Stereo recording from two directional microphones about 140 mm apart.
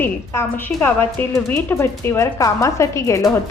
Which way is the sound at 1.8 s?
20° left (ahead or behind).